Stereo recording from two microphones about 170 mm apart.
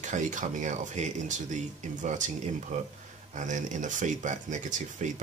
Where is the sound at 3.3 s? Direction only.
45° right (ahead or behind).